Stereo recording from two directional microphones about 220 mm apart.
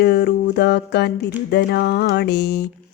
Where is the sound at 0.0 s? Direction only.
45° left (ahead or behind).